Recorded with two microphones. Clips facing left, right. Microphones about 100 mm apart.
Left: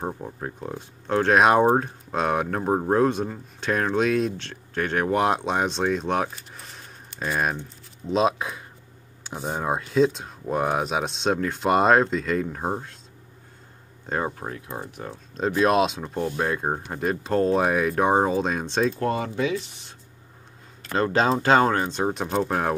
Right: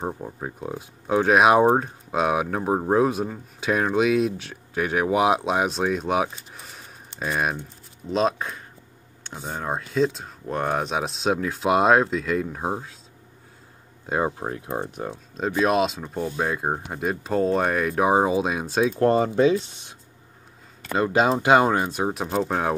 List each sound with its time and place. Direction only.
0.0 s speech: 5° right (ahead or behind)
14.0 s speech: 10° right (ahead or behind)
14.4 s speech: 30° right (ahead or behind)
15.3 s speech: centre (ahead or behind)
18.9 s speech: 35° right (ahead or behind)
20.9 s speech: 10° right (ahead or behind)